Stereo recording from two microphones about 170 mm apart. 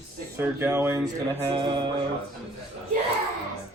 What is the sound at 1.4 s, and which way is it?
Mantra, 30° right (ahead or behind).